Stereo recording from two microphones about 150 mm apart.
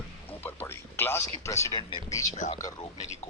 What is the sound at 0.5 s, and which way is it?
Speech, 15° left (ahead or behind).